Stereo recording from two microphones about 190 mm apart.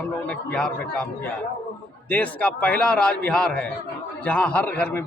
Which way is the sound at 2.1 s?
5° left (ahead or behind).